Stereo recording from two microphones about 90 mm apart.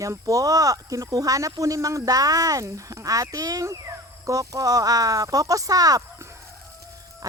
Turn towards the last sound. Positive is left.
turn(degrees=-35)  # may be behind; listen again after turning